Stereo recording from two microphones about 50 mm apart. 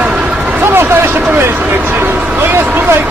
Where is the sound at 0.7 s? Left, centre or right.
Right.